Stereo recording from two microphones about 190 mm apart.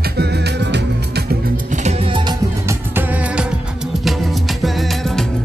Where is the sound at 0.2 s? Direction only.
60° right (ahead or behind).